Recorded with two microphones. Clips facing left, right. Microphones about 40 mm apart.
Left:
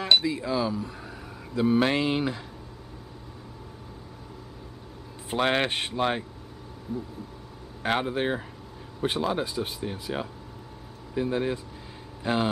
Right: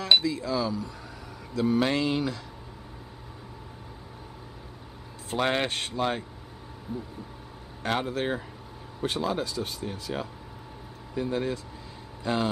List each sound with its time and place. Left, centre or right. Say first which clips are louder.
0.2 s speech: left 1 dB; left
5.3 s speech: left 2 dB; centre
6.9 s a sound: left 2 dB; centre
7.8 s speech: left 2 dB; centre